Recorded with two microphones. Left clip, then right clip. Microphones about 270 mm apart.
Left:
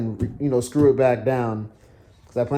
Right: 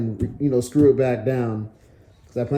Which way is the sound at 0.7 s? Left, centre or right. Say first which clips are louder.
Left 1 dB; left.